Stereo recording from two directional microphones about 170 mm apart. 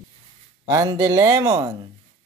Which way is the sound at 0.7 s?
20° right (ahead or behind).